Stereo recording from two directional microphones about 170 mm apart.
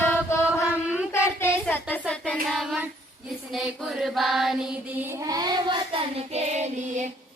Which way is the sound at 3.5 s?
Centre (ahead or behind).